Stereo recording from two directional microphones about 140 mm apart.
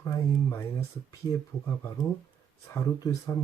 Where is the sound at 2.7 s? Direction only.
20° left (ahead or behind).